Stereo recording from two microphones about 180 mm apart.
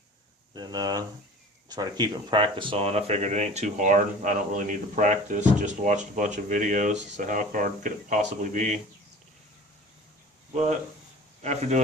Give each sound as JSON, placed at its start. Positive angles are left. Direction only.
{"t": 0.5, "sound": "speech", "side_deg": -25}
{"t": 10.5, "sound": "speech", "side_deg": -40}